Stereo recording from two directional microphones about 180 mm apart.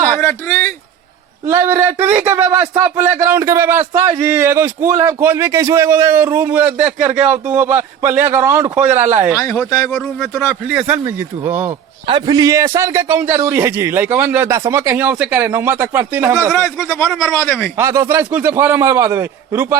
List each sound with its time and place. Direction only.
0.2 s speech: 15° left (ahead or behind)
1.5 s a man's voice: 15° right (ahead or behind)
9.6 s a man's voice: 20° left (ahead or behind)
9.9 s speech: 5° left (ahead or behind)
10.8 s a man's voice: 5° right (ahead or behind)
12.0 s a man's voice: 25° right (ahead or behind)
16.6 s a man's voice: 15° left (ahead or behind)
17.7 s a man's voice: 15° right (ahead or behind)